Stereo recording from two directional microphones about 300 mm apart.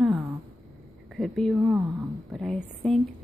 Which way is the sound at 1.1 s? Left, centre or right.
Centre.